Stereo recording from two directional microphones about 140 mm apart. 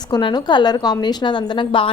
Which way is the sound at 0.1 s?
30° left (ahead or behind).